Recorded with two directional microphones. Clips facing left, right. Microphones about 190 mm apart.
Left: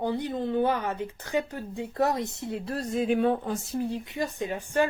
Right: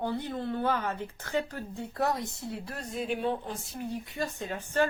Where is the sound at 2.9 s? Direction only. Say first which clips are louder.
Left 6 dB; 50° left (ahead or behind).